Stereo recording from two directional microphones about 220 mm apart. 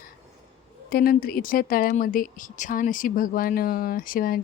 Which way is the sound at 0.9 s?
45° left (ahead or behind).